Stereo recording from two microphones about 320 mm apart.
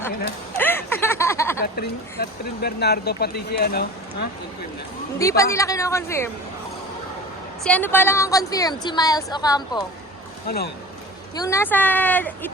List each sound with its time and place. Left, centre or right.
0.5 s a sound: centre
1.6 s speech: left
5.4 s a woman's voice: centre
7.6 s a woman's voice: centre
11.3 s speech: centre